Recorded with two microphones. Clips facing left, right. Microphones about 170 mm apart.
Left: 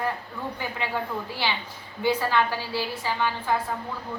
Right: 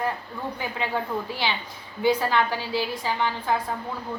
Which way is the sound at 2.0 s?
15° right (ahead or behind).